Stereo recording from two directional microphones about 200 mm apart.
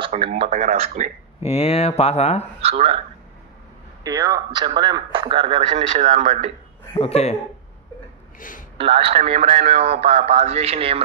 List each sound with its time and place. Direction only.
0.0 s speech: 30° right (ahead or behind)
1.4 s speech: 30° left (ahead or behind)
2.6 s speech: 30° right (ahead or behind)
4.0 s speech: 15° right (ahead or behind); by 6.5 s 40° right (ahead or behind)
6.9 s speech: 30° left (ahead or behind)
8.4 s a man's voice: 45° left (ahead or behind)
8.7 s speech: 30° right (ahead or behind)